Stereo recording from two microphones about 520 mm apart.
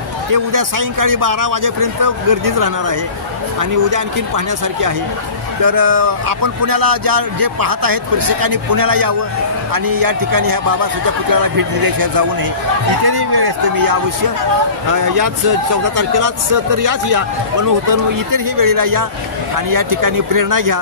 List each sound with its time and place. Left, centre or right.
0.3 s speech: right
5.6 s speech: right